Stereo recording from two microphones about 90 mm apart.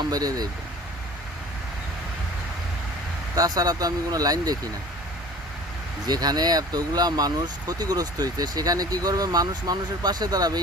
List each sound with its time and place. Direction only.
0.0 s speech: 45° right (ahead or behind)
3.3 s speech: 45° right (ahead or behind)
6.1 s speech: 50° right (ahead or behind)